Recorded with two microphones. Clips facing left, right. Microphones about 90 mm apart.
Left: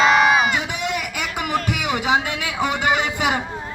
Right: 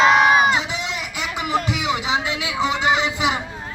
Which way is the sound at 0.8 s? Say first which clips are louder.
Left 2 dB; 50° left (ahead or behind).